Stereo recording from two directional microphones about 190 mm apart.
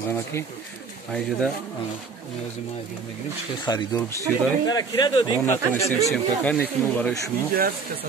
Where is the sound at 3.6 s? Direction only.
20° left (ahead or behind).